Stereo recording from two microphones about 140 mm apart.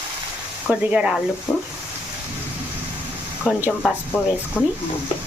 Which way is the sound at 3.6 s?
10° right (ahead or behind).